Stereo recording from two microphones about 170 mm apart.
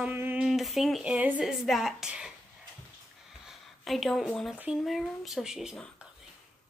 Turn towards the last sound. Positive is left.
turn(degrees=0)  # may be behind; listen again after turning